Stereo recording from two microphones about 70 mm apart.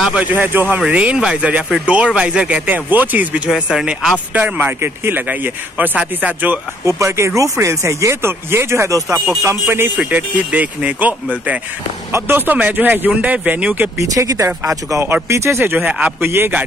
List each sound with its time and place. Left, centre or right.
0.2 s speech: right
2.6 s speech: right
3.4 s speech: centre
4.3 s speech: right
6.9 s speech: right
9.9 s speech: right
12.1 s speech: right
13.9 s speech: right
15.6 s speech: right